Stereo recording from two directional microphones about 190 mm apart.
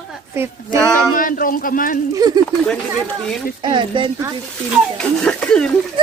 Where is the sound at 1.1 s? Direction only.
45° left (ahead or behind).